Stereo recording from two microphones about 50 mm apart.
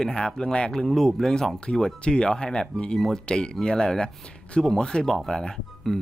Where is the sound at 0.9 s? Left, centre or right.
Centre.